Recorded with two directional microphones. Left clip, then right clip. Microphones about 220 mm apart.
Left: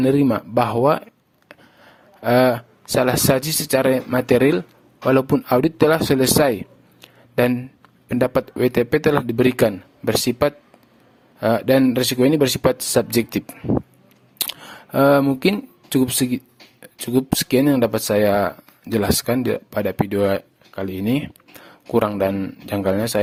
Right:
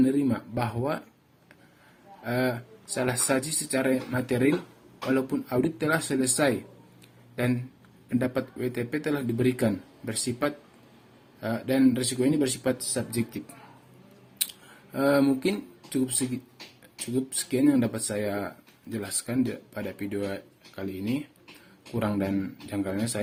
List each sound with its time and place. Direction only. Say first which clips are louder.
0.0 s speech: left 8 dB; 50° left (ahead or behind)
2.2 s speech: left 13 dB; 50° left (ahead or behind)
7.0 s a sound: left 12 dB; 45° left (ahead or behind)
8.1 s speech: left 10 dB; 50° left (ahead or behind)
14.9 s speech: left 8 dB; 45° left (ahead or behind)